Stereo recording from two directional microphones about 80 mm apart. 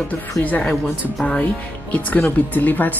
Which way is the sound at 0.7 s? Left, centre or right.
Centre.